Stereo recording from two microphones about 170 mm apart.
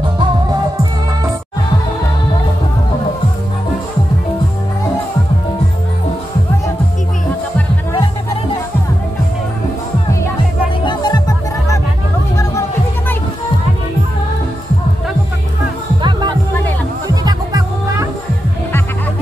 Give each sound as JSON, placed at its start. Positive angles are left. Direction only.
{"t": 10.9, "sound": "music", "side_deg": 25}
{"t": 16.0, "sound": "music", "side_deg": -25}